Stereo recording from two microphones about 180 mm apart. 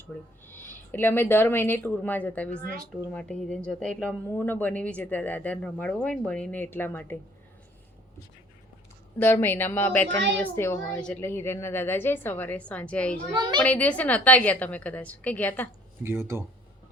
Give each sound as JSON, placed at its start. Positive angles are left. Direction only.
{"t": 0.0, "sound": "speech", "side_deg": 10}
{"t": 9.1, "sound": "speech", "side_deg": 10}
{"t": 13.3, "sound": "a child's voice", "side_deg": -25}
{"t": 13.6, "sound": "speech", "side_deg": 10}
{"t": 16.0, "sound": "speech", "side_deg": -15}